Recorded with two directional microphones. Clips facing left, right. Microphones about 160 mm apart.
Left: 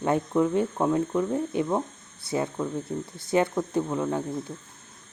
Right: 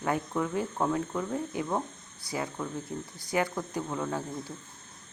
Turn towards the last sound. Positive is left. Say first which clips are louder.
# left 5 dB
turn(degrees=20)  # may be behind; listen again after turning